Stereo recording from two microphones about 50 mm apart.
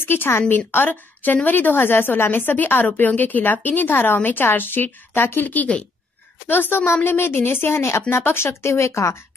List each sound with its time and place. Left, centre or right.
0.0 s a woman's voice: left
5.5 s a woman's voice: left
6.4 s a woman's voice: left
7.0 s a woman's voice: left